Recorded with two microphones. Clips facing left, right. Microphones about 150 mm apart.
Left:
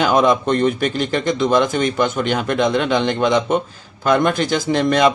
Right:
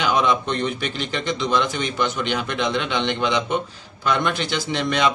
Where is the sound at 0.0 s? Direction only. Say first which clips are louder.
Left 5 dB; 45° left (ahead or behind).